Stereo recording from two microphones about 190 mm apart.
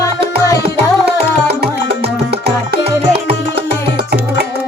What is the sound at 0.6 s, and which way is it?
Music, 60° right (ahead or behind).